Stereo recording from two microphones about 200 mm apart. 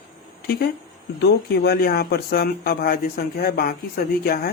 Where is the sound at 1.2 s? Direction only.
55° left (ahead or behind).